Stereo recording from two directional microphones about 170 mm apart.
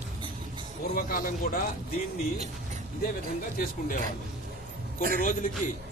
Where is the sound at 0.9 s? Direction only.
55° left (ahead or behind).